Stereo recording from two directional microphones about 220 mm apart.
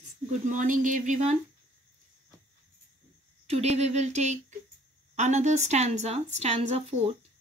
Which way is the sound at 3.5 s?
30° right (ahead or behind).